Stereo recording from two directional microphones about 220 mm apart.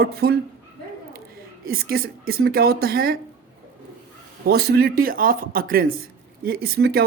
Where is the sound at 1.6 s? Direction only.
45° right (ahead or behind).